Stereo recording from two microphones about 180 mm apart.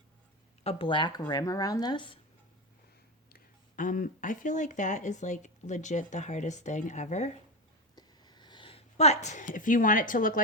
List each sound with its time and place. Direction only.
0.6 s speech: 30° left (ahead or behind)
3.2 s speech: 50° left (ahead or behind)
7.9 s a sound: 25° left (ahead or behind); by 10.4 s 50° left (ahead or behind)